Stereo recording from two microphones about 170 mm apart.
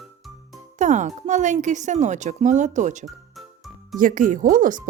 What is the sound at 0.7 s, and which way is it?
Speech, 45° right (ahead or behind).